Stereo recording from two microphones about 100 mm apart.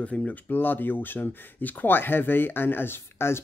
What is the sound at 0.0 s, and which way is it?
Speech, 10° left (ahead or behind).